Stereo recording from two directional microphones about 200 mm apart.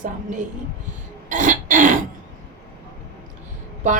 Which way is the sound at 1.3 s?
40° right (ahead or behind).